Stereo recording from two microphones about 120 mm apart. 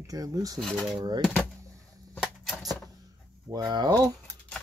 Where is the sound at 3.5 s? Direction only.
35° right (ahead or behind).